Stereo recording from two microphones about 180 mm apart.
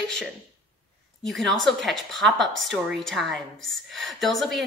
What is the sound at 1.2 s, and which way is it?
A woman's voice, centre (ahead or behind).